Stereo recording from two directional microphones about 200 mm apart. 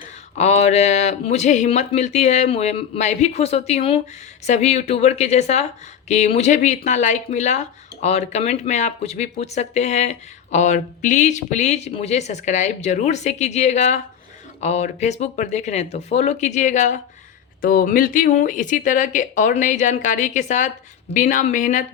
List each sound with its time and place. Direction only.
0.3 s speech: 35° left (ahead or behind)
17.6 s speech: 45° left (ahead or behind)